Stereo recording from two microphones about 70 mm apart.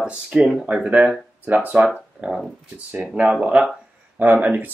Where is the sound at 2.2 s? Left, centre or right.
Centre.